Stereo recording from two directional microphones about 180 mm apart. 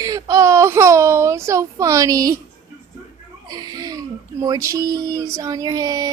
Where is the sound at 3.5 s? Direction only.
20° right (ahead or behind).